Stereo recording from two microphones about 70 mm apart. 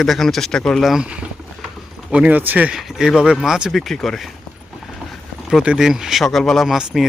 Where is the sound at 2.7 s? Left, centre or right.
Centre.